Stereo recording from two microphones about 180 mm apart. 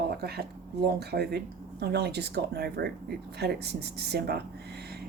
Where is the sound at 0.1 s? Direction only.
60° right (ahead or behind).